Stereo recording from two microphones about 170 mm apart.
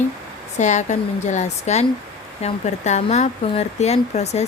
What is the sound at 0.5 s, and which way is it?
Speech, 45° left (ahead or behind).